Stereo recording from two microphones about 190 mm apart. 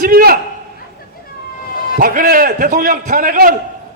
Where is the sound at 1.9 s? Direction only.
45° right (ahead or behind).